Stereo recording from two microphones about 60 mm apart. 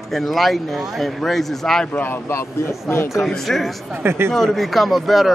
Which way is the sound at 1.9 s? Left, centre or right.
Left.